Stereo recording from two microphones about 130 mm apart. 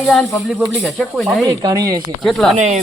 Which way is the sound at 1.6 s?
30° right (ahead or behind).